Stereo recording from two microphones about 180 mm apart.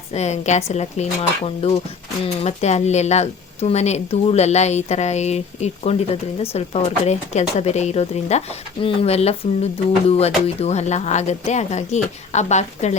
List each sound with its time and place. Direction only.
0.1 s speech: 40° left (ahead or behind)